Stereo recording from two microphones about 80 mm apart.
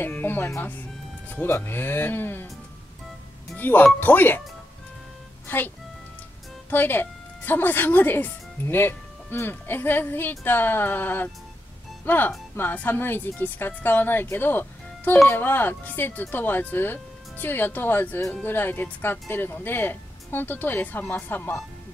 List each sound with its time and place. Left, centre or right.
0.0 s speech: left
3.5 s speech: left
5.5 s speech: left
6.7 s speech: left